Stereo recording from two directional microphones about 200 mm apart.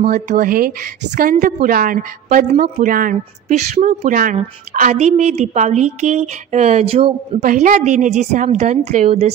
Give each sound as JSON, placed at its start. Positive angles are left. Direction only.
{"t": 0.0, "sound": "a woman's voice", "side_deg": -45}
{"t": 7.3, "sound": "a woman's voice", "side_deg": -40}